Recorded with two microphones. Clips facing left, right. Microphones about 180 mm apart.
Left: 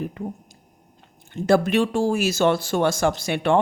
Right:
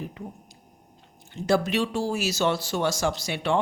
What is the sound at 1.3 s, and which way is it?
Speech, 55° left (ahead or behind).